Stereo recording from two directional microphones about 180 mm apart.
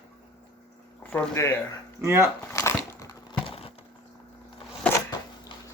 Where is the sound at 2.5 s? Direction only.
15° left (ahead or behind).